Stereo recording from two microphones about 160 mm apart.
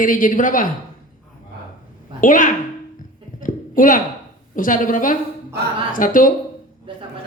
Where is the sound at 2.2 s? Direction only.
55° left (ahead or behind).